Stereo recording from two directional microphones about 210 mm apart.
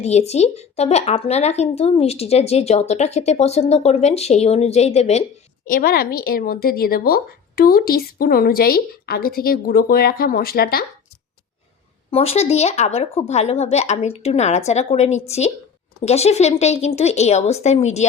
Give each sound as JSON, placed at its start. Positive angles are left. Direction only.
{"t": 0.0, "sound": "speech", "side_deg": 30}
{"t": 5.6, "sound": "a woman's voice", "side_deg": 40}
{"t": 12.1, "sound": "speech", "side_deg": 30}